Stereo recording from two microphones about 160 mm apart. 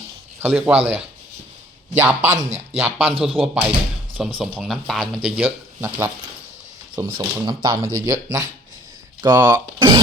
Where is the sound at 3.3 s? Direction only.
5° right (ahead or behind).